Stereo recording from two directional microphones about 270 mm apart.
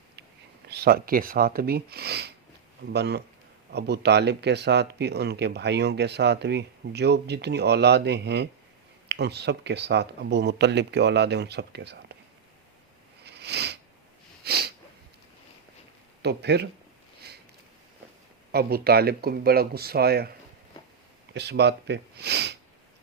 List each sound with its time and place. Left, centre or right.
0.7 s speech: right
13.2 s a sound: right
14.4 s sneeze: right
16.2 s speech: right
18.5 s speech: right
21.3 s speech: right